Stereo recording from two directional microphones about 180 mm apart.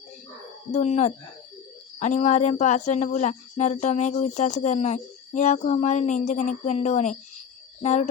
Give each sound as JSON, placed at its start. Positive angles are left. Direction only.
{"t": 0.7, "sound": "speech", "side_deg": 40}
{"t": 7.8, "sound": "cricket", "side_deg": 40}